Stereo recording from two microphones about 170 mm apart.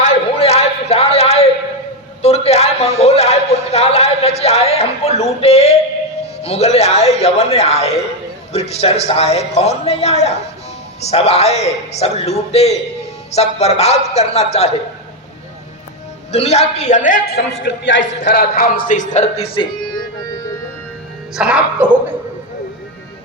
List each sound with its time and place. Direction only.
0.0 s a sound: 35° left (ahead or behind)
6.4 s a man's voice: 40° left (ahead or behind)
16.3 s a man's voice: 40° left (ahead or behind); by 17.4 s 60° left (ahead or behind)
17.8 s a man's voice: 90° left; by 19.6 s 35° left (ahead or behind)
21.3 s speech: 5° right (ahead or behind)